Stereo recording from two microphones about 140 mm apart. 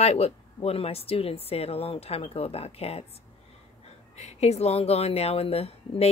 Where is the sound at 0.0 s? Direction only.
50° left (ahead or behind).